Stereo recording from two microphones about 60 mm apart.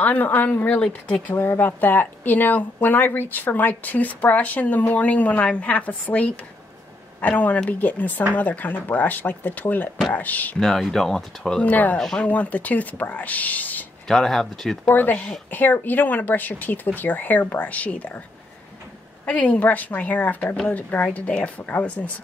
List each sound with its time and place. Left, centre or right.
0.0 s a woman's voice: left
10.6 s speech: centre
11.7 s a woman's voice: left
14.0 s speech: centre
14.9 s a woman's voice: left
19.2 s a woman's voice: left